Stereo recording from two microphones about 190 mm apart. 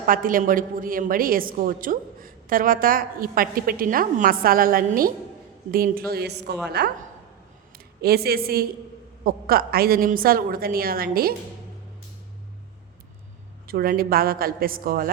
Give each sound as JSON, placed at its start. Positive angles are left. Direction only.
{"t": 0.0, "sound": "a woman's voice", "side_deg": -45}
{"t": 8.0, "sound": "a woman's voice", "side_deg": -55}
{"t": 13.7, "sound": "a woman's voice", "side_deg": -50}